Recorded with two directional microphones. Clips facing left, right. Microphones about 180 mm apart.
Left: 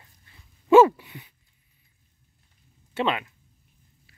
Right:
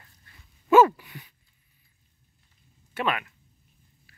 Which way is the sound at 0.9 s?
20° left (ahead or behind).